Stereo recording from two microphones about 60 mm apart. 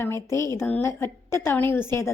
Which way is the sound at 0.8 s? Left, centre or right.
Left.